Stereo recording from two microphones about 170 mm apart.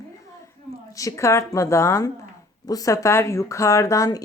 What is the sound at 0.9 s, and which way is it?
Speech, 20° left (ahead or behind).